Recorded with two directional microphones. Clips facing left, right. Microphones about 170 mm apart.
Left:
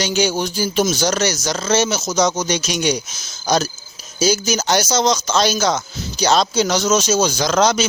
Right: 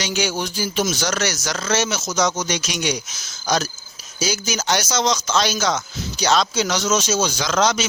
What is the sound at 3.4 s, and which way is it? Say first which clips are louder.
Speech: left 3 dB; 30° left (ahead or behind).